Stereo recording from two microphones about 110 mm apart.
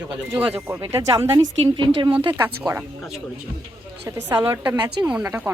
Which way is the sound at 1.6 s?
45° right (ahead or behind).